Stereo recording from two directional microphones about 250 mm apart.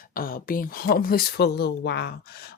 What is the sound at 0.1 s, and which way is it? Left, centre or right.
Speech, left.